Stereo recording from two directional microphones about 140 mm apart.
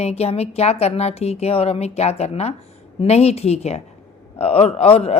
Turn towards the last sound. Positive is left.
turn(degrees=45)  # may be behind; listen again after turning